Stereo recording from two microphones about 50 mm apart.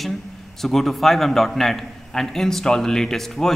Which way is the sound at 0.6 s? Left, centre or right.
Centre.